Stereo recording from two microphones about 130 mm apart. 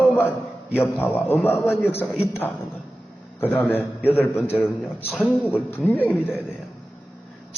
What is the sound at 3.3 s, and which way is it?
A man's voice, 15° left (ahead or behind).